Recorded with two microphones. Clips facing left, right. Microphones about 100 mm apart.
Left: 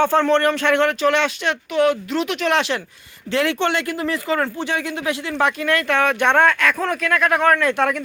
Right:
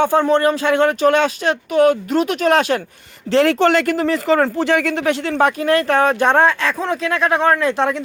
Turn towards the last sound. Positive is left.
turn(degrees=-25)  # may be behind; listen again after turning